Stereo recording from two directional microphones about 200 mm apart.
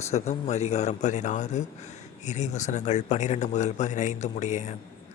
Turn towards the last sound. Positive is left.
turn(degrees=35)  # may be behind; listen again after turning